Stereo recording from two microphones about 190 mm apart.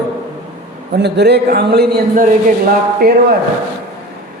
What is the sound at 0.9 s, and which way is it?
A man's voice, 60° right (ahead or behind).